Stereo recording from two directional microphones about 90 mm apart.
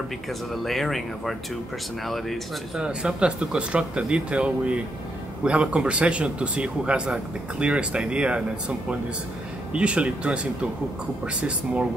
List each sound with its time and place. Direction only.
0.7 s speech: centre (ahead or behind)
2.8 s speech: 10° right (ahead or behind)